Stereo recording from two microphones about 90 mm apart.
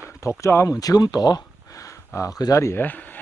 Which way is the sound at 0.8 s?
45° left (ahead or behind).